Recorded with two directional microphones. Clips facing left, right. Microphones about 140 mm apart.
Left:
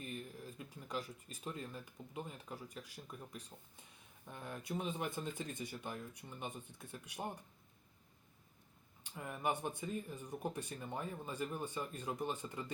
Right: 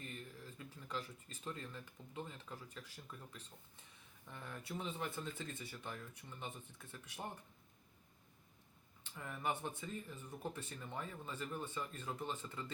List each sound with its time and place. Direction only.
0.0 s speech: 15° left (ahead or behind)
9.0 s speech: 15° left (ahead or behind)